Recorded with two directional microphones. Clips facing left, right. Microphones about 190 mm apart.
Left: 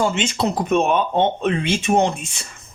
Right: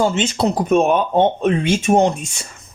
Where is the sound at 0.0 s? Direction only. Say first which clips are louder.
Right 3 dB; 35° right (ahead or behind).